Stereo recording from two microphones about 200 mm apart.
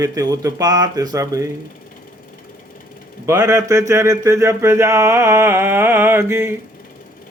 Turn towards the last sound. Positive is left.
turn(degrees=-10)  # may be behind; listen again after turning